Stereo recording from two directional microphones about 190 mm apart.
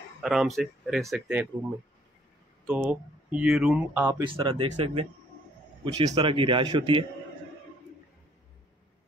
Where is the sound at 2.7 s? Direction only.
5° right (ahead or behind).